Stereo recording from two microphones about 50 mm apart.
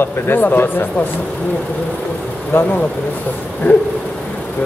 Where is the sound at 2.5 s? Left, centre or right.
Left.